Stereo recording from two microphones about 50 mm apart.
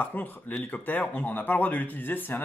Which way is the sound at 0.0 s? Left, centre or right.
Left.